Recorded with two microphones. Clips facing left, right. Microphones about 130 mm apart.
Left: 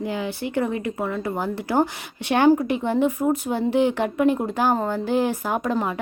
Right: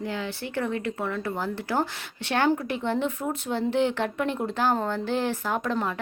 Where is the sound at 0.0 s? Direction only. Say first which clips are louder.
Left 5 dB; 15° left (ahead or behind).